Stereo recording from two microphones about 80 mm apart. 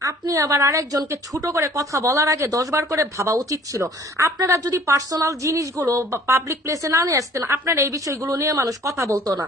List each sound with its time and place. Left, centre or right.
0.0 s a woman's voice: right